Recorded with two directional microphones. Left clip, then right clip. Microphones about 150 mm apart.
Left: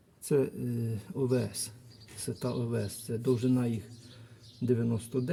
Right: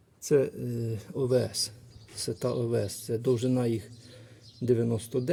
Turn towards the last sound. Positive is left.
turn(degrees=-30)  # may be behind; listen again after turning